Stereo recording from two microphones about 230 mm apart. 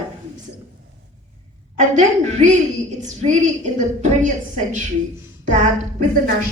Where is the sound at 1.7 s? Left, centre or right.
Right.